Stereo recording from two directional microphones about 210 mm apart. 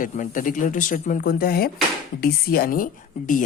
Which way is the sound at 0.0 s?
40° left (ahead or behind).